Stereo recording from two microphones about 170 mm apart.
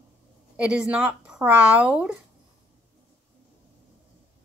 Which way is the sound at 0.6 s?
5° right (ahead or behind).